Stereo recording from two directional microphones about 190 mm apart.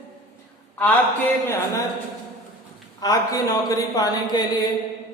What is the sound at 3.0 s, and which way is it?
Speech, 20° left (ahead or behind).